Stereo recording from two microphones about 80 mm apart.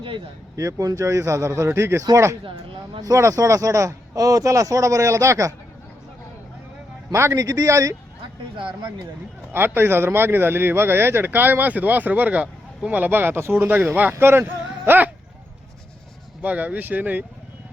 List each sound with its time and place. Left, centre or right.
0.5 s speech: right
2.4 s speech: right
3.0 s speech: right
7.1 s speech: right
8.5 s speech: right
9.5 s speech: right
16.4 s speech: centre